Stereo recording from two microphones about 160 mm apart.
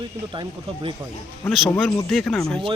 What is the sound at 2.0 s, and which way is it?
Speech, centre (ahead or behind).